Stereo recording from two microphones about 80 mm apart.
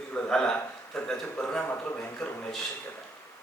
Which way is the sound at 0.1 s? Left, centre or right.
Centre.